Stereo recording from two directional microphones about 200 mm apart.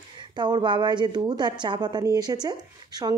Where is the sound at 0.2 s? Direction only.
20° right (ahead or behind).